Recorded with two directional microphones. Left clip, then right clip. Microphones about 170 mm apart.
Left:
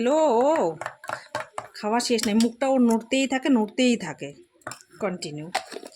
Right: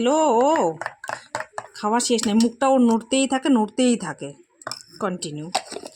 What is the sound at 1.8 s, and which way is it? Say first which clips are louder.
Speech: right 3 dB; 25° right (ahead or behind).